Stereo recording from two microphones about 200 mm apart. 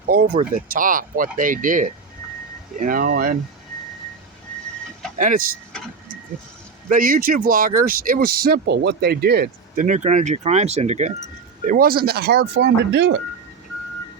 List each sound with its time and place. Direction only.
0.1 s speech: 45° right (ahead or behind)
5.1 s speech: 40° right (ahead or behind)
6.8 s speech: 45° right (ahead or behind)
9.8 s speech: 35° right (ahead or behind); by 13.1 s 60° right (ahead or behind)